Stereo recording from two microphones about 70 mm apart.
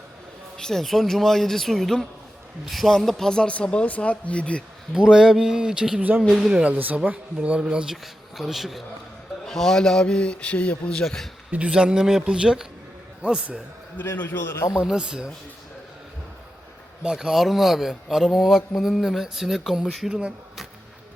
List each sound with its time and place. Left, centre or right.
0.5 s speech: centre
4.9 s speech: centre
11.5 s speech: centre
14.0 s a man's voice: left
14.8 s speech: centre
17.0 s speech: centre